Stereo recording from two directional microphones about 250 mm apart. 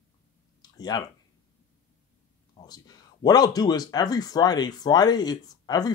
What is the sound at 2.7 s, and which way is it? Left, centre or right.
Speech, centre.